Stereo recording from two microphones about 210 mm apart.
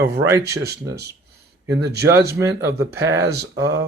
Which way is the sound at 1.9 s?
50° right (ahead or behind).